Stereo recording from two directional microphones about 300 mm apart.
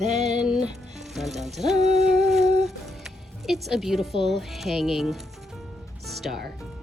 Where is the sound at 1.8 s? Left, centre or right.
Right.